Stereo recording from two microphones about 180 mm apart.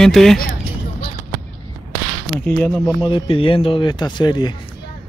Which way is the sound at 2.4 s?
5° left (ahead or behind).